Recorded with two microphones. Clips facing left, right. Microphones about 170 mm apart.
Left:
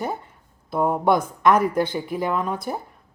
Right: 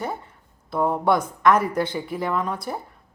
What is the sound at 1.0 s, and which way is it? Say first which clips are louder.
Speech: even; 20° left (ahead or behind).